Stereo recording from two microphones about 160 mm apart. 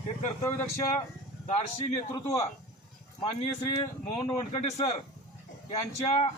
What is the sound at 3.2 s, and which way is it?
A man's voice, 35° left (ahead or behind).